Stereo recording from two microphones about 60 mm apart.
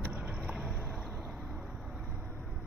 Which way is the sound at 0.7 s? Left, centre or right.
Right.